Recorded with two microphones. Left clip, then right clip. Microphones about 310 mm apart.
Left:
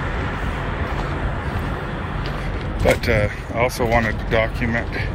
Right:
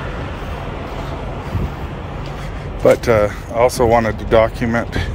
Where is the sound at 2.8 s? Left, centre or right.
Centre.